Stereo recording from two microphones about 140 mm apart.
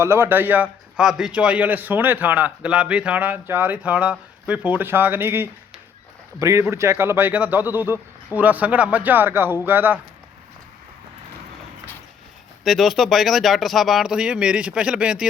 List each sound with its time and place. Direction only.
0.0 s a man's voice: 15° right (ahead or behind)
12.6 s speech: centre (ahead or behind)